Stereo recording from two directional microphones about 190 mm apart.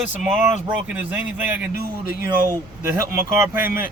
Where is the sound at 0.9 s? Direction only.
10° right (ahead or behind).